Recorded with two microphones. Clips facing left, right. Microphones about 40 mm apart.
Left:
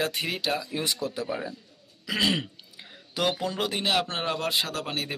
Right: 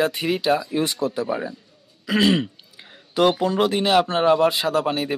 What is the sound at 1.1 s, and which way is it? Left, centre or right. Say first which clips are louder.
Speech: right 6 dB; right.